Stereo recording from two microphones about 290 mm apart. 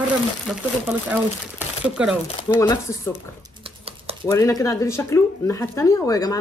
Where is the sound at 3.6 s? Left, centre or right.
Centre.